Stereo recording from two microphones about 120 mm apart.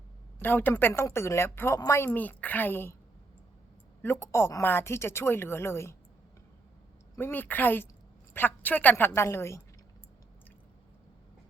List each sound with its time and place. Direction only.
0.3 s a woman's voice: 15° left (ahead or behind)
4.0 s a woman's voice: 20° left (ahead or behind)
7.2 s a woman's voice: 15° left (ahead or behind)